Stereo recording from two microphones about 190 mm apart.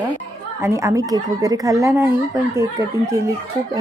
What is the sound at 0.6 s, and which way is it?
A woman's voice, 15° right (ahead or behind).